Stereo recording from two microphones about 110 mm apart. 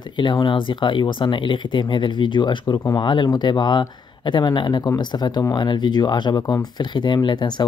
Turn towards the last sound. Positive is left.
turn(degrees=45)  # may be behind; listen again after turning